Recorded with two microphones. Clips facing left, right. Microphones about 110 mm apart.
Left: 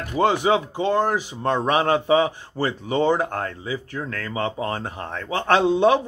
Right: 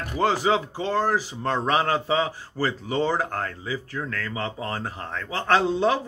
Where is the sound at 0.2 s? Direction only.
20° left (ahead or behind).